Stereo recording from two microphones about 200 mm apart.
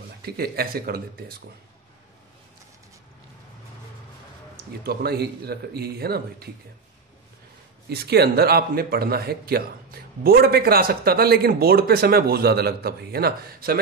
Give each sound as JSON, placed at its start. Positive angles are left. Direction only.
{"t": 0.2, "sound": "speech", "side_deg": -50}
{"t": 4.6, "sound": "speech", "side_deg": -50}
{"t": 7.9, "sound": "speech", "side_deg": -55}